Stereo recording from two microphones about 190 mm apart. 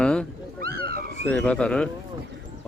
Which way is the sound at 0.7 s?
50° right (ahead or behind).